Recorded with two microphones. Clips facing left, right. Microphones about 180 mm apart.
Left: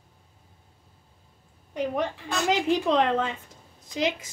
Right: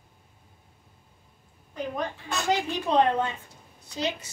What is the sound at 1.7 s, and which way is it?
A woman's voice, 90° left.